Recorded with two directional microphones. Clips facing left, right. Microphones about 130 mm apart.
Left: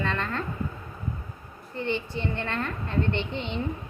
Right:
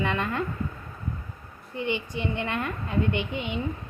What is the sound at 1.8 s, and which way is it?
Speech, 15° right (ahead or behind).